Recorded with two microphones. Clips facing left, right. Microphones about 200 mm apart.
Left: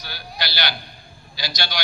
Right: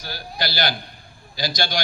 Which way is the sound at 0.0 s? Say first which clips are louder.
Right 3 dB; 45° right (ahead or behind).